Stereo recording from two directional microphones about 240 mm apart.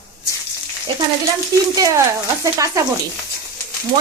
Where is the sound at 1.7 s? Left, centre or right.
Centre.